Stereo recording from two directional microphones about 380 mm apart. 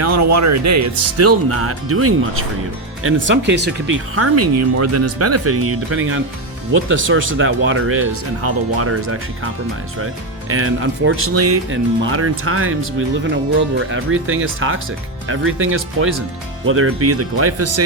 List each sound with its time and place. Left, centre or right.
0.0 s speech: right
10.5 s speech: right